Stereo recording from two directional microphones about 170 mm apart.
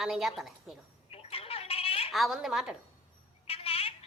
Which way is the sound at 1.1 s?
35° left (ahead or behind).